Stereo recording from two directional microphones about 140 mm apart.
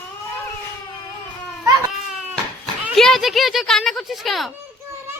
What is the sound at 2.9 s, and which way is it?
A woman's voice, centre (ahead or behind).